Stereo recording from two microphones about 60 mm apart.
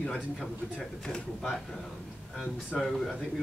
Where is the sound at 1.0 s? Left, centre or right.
Centre.